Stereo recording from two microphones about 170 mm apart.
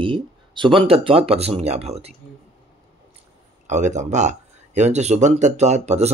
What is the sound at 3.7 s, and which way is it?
Speech, 45° right (ahead or behind).